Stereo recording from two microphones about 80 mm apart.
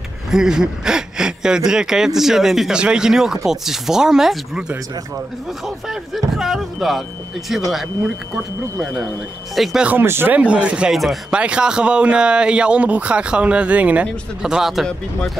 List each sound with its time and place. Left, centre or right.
0.3 s speech: centre
5.9 s speech: centre
9.6 s speech: centre
9.8 s speech: right
10.4 s speech: centre
10.9 s speech: centre
11.3 s speech: centre